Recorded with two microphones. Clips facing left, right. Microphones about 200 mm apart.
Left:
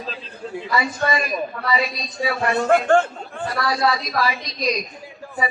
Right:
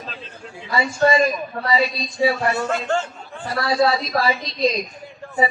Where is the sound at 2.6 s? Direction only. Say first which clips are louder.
Left 7 dB; 55° left (ahead or behind).